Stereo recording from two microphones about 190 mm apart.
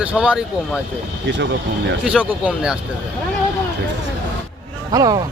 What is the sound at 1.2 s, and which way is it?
Speech, 65° right (ahead or behind).